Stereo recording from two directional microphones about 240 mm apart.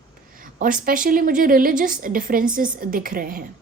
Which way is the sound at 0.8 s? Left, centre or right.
Right.